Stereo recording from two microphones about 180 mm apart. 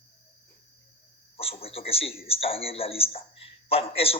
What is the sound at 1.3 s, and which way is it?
A man's voice, 30° left (ahead or behind).